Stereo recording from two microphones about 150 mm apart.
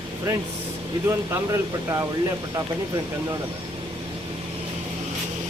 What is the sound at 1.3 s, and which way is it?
Speech, 20° right (ahead or behind).